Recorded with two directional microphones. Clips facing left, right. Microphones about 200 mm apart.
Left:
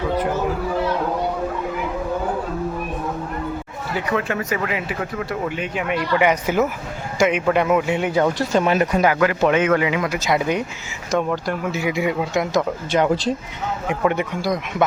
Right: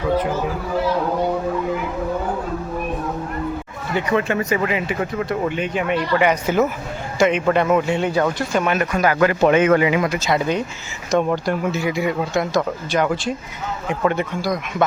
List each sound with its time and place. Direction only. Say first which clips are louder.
3.9 s speech: right 3 dB; centre (ahead or behind)
6.1 s a man's voice: even; 15° left (ahead or behind)
8.3 s speech: left 2 dB; 30° left (ahead or behind)
9.1 s speech: right 2 dB; centre (ahead or behind)
10.1 s a man's voice: even; 15° left (ahead or behind)
11.1 s speech: right 2 dB; centre (ahead or behind)
11.4 s a man's voice: right 2 dB; 10° left (ahead or behind)
13.8 s a man's voice: even; 15° left (ahead or behind)